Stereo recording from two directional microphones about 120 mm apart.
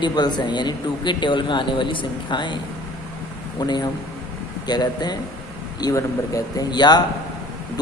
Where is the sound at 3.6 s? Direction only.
35° left (ahead or behind).